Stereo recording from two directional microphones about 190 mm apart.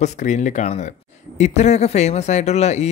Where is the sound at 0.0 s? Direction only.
40° left (ahead or behind).